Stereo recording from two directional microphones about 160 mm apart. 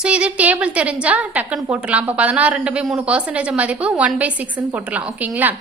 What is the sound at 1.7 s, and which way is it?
A woman's voice, 10° right (ahead or behind).